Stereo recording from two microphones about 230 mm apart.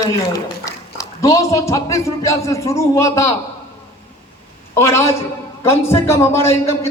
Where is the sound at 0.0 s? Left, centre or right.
Centre.